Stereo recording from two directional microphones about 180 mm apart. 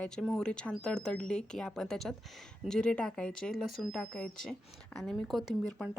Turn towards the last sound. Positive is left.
turn(degrees=0)  # may be behind; listen again after turning